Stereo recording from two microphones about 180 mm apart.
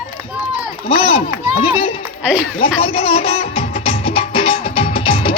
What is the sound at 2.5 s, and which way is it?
Music, 30° left (ahead or behind).